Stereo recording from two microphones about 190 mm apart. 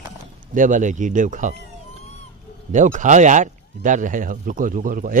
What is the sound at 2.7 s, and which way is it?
Speech, 40° right (ahead or behind).